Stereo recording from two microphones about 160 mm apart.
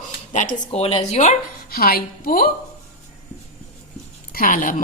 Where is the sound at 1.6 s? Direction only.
65° left (ahead or behind).